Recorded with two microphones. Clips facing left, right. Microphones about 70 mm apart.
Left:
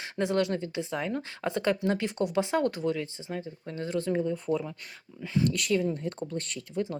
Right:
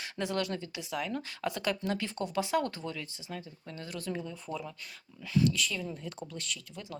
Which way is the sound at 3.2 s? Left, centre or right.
Left.